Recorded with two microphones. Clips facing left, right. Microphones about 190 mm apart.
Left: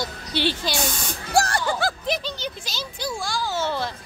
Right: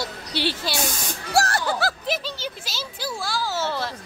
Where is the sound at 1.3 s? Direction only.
5° right (ahead or behind).